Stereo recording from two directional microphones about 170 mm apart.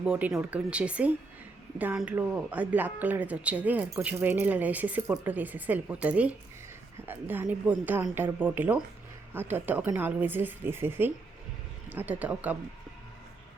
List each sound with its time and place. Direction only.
0.0 s speech: 5° right (ahead or behind)